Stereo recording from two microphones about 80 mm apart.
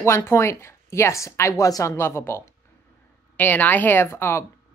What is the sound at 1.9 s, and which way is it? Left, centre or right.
A woman's voice, left.